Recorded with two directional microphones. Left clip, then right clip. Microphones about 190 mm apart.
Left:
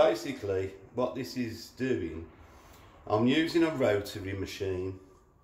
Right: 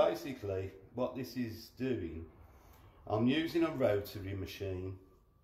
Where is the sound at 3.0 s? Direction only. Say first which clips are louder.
Left 6 dB; 25° right (ahead or behind).